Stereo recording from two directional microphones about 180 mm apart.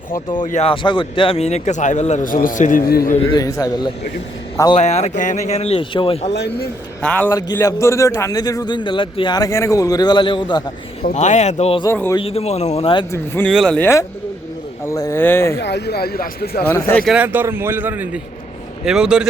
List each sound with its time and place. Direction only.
0.4 s speech: 35° left (ahead or behind); by 3.2 s 55° left (ahead or behind)
3.3 s a man's voice: 20° left (ahead or behind)
4.8 s speech: 40° left (ahead or behind)
6.3 s speech: 65° left (ahead or behind)
7.0 s speech: 10° left (ahead or behind)
7.3 s a man's voice: 20° left (ahead or behind)
11.1 s speech: 40° left (ahead or behind)
13.1 s speech: 10° left (ahead or behind)
15.5 s speech: 65° left (ahead or behind)
16.6 s speech: 15° left (ahead or behind)
17.0 s a man's voice: 5° right (ahead or behind)